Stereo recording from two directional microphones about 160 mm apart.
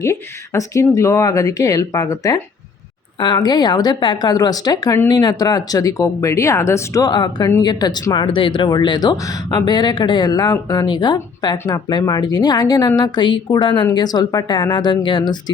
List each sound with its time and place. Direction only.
0.0 s speech: 20° left (ahead or behind)
11.5 s speech: 15° left (ahead or behind)
11.9 s speech: 25° left (ahead or behind)